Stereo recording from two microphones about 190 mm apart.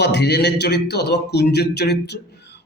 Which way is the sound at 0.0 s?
65° left (ahead or behind).